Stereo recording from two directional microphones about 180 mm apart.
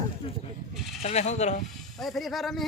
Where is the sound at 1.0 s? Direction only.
40° left (ahead or behind).